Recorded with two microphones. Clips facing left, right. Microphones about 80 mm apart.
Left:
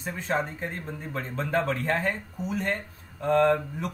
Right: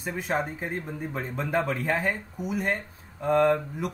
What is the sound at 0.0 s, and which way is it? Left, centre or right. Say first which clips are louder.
Speech: even; centre.